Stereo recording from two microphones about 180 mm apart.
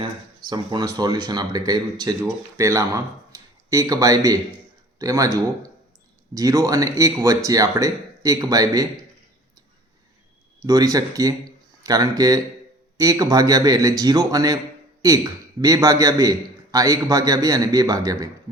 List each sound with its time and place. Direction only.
0.5 s speech: 25° right (ahead or behind)
10.6 s speech: 20° right (ahead or behind)